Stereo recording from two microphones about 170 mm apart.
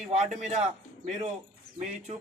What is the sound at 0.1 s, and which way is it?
Speech, 40° right (ahead or behind).